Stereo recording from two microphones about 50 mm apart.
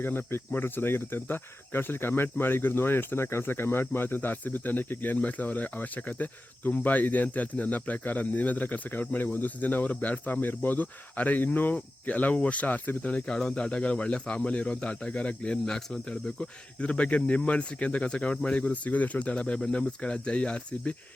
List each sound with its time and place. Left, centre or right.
0.0 s speech: left
13.1 s speech: centre